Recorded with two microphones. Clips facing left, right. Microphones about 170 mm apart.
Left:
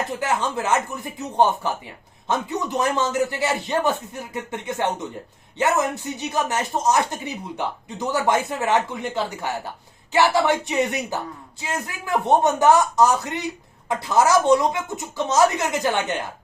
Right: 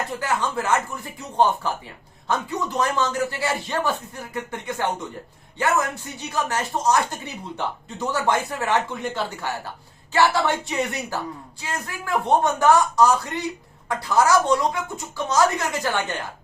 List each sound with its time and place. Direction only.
0.2 s speech: 20° left (ahead or behind)